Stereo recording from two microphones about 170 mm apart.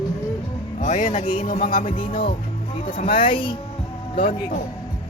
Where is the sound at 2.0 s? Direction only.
30° left (ahead or behind).